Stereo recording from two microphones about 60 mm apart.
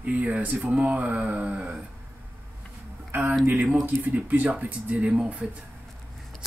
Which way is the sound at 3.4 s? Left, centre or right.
Right.